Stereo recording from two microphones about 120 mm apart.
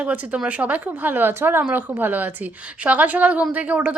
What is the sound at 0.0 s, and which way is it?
A woman's voice, 10° right (ahead or behind).